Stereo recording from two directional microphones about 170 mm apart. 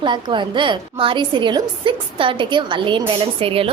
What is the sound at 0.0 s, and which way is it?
A woman's voice, 30° right (ahead or behind).